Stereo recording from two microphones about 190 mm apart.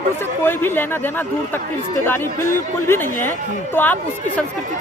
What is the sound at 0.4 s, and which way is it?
Speech, 10° left (ahead or behind).